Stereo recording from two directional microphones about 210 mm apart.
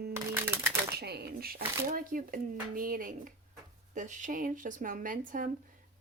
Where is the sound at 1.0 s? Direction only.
50° right (ahead or behind).